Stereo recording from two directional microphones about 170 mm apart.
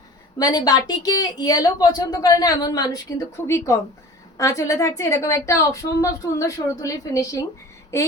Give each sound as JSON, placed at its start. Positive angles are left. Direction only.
{"t": 0.3, "sound": "a woman's voice", "side_deg": 20}